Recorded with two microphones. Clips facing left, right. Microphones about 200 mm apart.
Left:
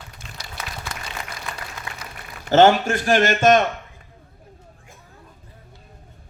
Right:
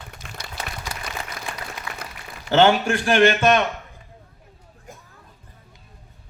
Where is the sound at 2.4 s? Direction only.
45° left (ahead or behind).